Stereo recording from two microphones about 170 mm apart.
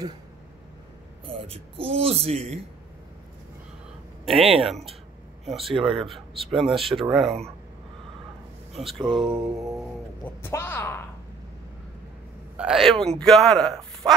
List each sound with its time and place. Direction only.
1.2 s speech: 35° right (ahead or behind)
4.3 s speech: 35° right (ahead or behind)
5.5 s a man's voice: centre (ahead or behind)
5.8 s speech: 30° right (ahead or behind)
6.0 s a man's voice: centre (ahead or behind)
8.9 s a sound: 30° right (ahead or behind)
9.2 s a man's voice: centre (ahead or behind)
10.2 s speech: 15° left (ahead or behind)
12.5 s a man's voice: 5° right (ahead or behind)